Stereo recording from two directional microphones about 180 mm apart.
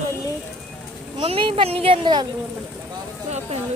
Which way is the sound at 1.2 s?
30° right (ahead or behind).